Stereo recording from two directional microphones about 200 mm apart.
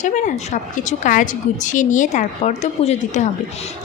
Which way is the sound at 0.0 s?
40° left (ahead or behind).